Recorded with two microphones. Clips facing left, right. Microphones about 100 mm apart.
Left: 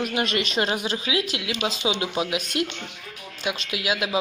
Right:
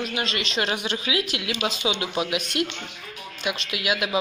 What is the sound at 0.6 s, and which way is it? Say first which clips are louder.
Speech: left 1 dB; 30° left (ahead or behind).